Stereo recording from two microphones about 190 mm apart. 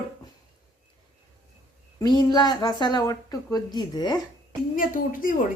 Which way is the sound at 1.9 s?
20° left (ahead or behind).